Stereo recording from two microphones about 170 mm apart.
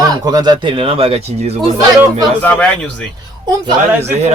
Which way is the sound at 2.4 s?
5° left (ahead or behind).